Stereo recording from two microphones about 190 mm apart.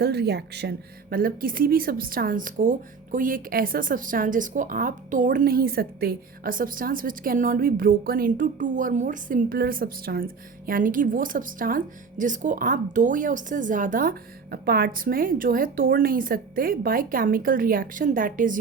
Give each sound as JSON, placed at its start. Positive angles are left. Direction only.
{"t": 0.0, "sound": "speech", "side_deg": -60}